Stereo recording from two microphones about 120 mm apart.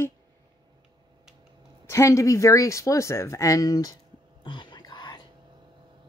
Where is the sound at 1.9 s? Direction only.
25° left (ahead or behind).